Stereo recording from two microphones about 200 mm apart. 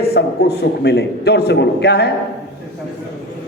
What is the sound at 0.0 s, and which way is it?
A man's voice, 55° left (ahead or behind).